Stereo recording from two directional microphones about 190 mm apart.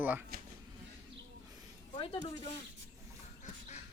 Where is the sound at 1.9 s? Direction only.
30° left (ahead or behind).